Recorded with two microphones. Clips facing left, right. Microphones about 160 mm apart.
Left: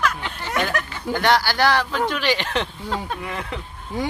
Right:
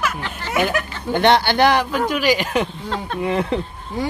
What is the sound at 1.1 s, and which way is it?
A man's voice, 25° right (ahead or behind).